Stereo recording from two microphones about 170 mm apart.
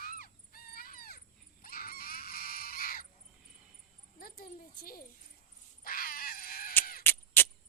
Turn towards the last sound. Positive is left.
turn(degrees=10)  # may be behind; listen again after turning